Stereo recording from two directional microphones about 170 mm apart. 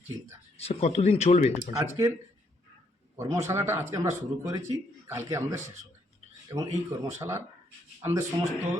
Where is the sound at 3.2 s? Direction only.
15° right (ahead or behind).